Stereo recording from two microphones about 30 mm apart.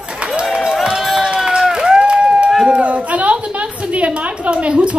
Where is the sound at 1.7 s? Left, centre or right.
Right.